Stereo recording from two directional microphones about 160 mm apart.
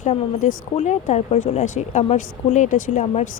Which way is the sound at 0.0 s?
50° left (ahead or behind).